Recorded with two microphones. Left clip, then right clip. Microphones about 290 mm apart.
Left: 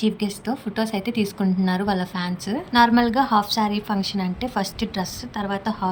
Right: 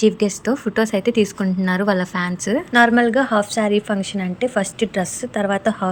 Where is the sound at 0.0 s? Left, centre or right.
Centre.